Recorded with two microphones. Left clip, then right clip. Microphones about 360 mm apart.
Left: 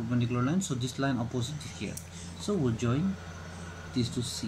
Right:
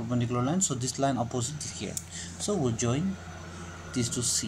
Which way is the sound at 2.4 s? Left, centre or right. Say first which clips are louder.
Right 2 dB; centre.